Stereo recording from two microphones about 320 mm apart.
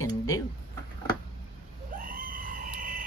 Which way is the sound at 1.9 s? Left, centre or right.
Right.